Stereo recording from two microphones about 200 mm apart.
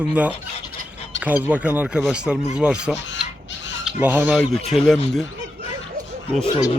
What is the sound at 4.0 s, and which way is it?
Speech, 10° right (ahead or behind).